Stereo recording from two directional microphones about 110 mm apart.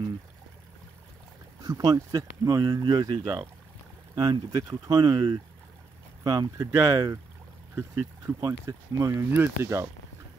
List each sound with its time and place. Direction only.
1.6 s speech: 35° right (ahead or behind)
6.2 s speech: 30° right (ahead or behind)
8.3 s speech: 30° right (ahead or behind)
9.3 s speech: 20° right (ahead or behind)